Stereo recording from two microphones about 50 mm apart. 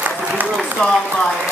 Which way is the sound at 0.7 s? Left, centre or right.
Centre.